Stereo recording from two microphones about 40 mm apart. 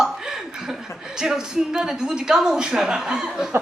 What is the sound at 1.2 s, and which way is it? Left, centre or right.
Speech, centre.